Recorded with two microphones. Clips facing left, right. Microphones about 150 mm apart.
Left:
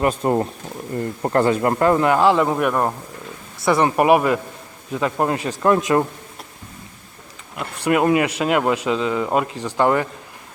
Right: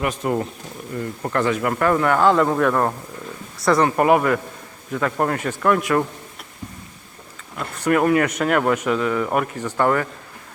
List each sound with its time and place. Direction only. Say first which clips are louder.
0.0 s speech: left 4 dB; 30° left (ahead or behind)
7.5 s speech: even; 15° left (ahead or behind)